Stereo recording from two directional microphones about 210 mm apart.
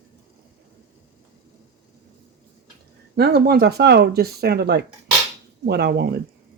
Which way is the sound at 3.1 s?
50° right (ahead or behind).